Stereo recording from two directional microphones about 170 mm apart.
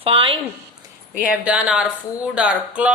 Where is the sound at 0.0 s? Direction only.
30° right (ahead or behind).